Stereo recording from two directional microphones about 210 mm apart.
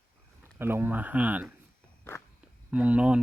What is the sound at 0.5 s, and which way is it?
Speech, 10° right (ahead or behind).